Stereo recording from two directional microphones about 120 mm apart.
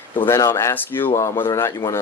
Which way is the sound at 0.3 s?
20° left (ahead or behind).